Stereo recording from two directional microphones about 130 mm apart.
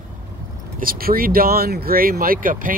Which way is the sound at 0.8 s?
90° right.